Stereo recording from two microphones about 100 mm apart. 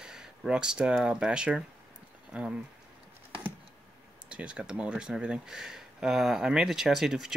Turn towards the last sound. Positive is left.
turn(degrees=-5)  # may be behind; listen again after turning